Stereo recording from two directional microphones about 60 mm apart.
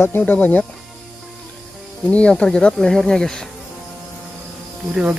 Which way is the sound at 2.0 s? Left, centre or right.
Centre.